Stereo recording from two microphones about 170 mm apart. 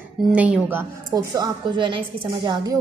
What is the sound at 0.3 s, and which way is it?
A woman's voice, 10° right (ahead or behind).